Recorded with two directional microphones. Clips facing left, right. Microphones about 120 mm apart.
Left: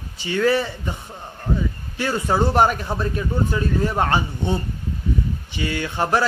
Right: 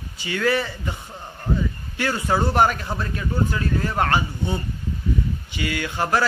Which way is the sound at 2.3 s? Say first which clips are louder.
Left 2 dB; 20° left (ahead or behind).